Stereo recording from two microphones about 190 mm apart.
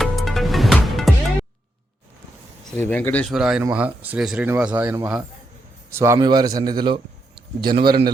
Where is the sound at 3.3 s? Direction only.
5° right (ahead or behind); by 6.9 s 20° right (ahead or behind).